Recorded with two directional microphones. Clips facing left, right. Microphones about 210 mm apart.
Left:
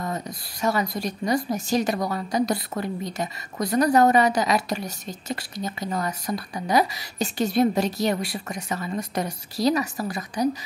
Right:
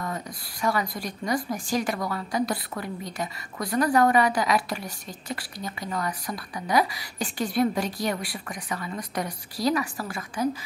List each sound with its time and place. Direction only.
0.0 s a woman's voice: 25° left (ahead or behind)